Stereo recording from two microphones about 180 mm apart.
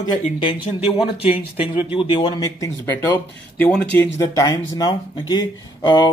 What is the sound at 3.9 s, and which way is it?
Speech, 15° left (ahead or behind).